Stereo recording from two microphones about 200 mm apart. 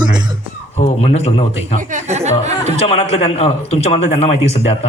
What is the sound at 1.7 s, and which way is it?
Speech, 40° right (ahead or behind).